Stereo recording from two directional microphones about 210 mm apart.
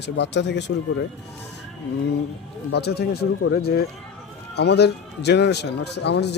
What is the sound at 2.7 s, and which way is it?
A man's voice, 50° left (ahead or behind).